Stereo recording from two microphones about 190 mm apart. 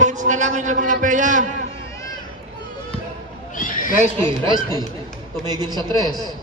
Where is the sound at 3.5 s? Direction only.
45° left (ahead or behind).